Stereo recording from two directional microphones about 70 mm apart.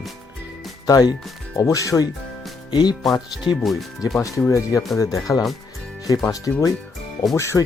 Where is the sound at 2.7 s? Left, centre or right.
Left.